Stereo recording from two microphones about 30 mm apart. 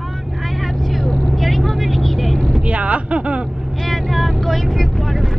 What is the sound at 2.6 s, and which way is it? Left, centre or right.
Speech, right.